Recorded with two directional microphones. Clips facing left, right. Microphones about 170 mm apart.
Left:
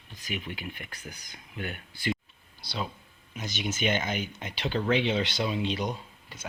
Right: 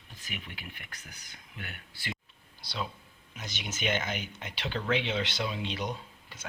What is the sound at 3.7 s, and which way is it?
Speech, 15° left (ahead or behind).